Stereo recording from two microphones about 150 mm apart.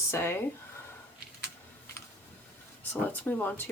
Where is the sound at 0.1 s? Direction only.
15° left (ahead or behind).